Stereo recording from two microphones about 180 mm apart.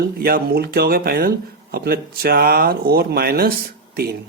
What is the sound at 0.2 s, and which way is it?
Speech, 55° right (ahead or behind).